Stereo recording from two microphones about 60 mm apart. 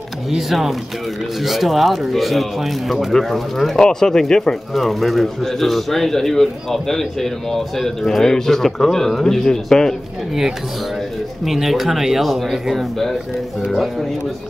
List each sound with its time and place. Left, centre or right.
0.3 s a man's voice: centre
11.4 s a man's voice: centre